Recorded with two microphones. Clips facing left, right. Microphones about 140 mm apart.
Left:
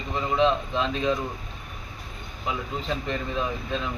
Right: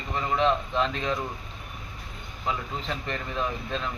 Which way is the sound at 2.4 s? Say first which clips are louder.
Left 2 dB; 15° left (ahead or behind).